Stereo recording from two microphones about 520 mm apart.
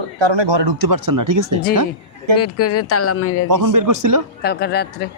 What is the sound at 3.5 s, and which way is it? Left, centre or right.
Speech, right.